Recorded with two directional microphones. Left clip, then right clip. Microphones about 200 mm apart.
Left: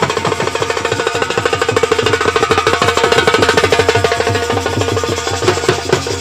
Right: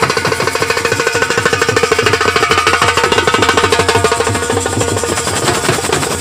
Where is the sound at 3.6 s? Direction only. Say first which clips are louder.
Even; 30° right (ahead or behind).